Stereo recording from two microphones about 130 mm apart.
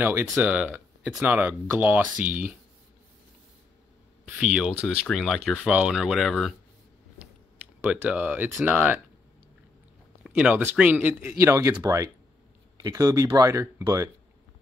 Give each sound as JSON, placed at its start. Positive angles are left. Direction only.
{"t": 0.0, "sound": "speech", "side_deg": -15}
{"t": 4.3, "sound": "speech", "side_deg": -10}
{"t": 7.8, "sound": "speech", "side_deg": -10}
{"t": 10.2, "sound": "speech", "side_deg": -10}